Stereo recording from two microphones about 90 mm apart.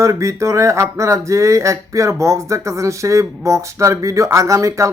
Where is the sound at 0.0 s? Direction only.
35° right (ahead or behind).